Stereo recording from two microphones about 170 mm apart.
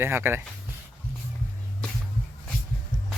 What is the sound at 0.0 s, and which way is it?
Speech, 15° right (ahead or behind).